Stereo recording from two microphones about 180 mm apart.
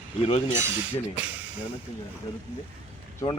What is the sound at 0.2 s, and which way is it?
Speech, 35° left (ahead or behind).